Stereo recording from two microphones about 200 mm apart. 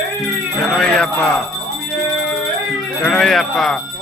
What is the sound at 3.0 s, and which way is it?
Speech, 5° left (ahead or behind).